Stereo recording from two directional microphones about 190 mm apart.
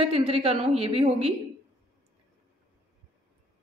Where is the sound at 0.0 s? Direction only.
30° right (ahead or behind).